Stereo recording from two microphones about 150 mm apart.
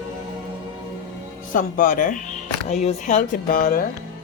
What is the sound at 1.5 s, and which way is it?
Speech, 65° left (ahead or behind).